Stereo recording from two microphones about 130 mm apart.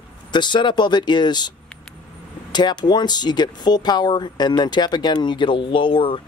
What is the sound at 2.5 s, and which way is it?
Speech, 35° left (ahead or behind).